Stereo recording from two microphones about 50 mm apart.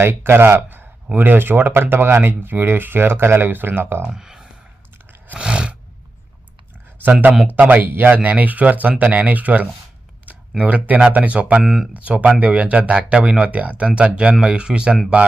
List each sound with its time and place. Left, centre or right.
0.1 s speech: right
1.1 s speech: right
4.1 s a sound: centre
5.4 s roar: centre
7.0 s speech: right
11.6 s speech: centre
11.9 s speech: right